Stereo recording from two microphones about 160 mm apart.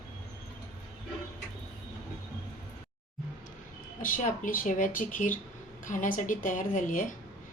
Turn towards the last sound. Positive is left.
turn(degrees=55)  # may be behind; listen again after turning